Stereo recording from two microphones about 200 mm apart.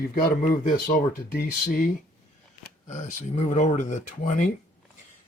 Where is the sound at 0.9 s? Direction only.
40° left (ahead or behind).